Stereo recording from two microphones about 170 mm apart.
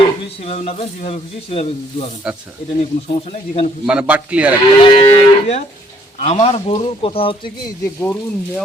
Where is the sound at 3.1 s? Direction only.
35° left (ahead or behind).